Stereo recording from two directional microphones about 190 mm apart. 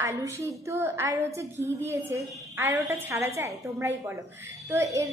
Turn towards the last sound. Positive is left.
turn(degrees=-15)  # may be behind; listen again after turning